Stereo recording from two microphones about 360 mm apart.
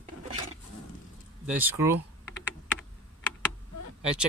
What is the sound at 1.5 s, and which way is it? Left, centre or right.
Speech, centre.